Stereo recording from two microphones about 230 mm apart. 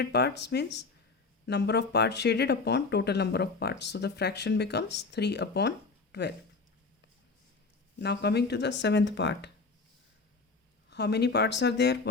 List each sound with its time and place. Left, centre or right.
0.0 s speech: left
7.9 s speech: left
10.8 s speech: left